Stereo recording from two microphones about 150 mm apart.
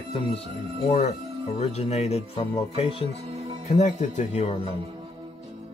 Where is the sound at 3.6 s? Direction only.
50° left (ahead or behind).